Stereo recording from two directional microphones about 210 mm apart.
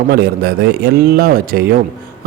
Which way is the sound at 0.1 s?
45° right (ahead or behind).